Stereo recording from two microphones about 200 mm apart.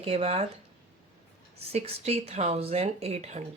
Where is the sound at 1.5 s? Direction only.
30° right (ahead or behind).